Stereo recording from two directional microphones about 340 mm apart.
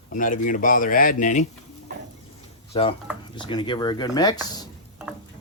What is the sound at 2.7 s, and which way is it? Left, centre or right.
Speech, centre.